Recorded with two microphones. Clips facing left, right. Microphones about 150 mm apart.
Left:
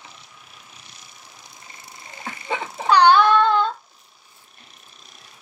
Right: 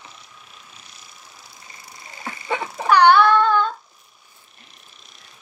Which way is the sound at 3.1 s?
20° left (ahead or behind).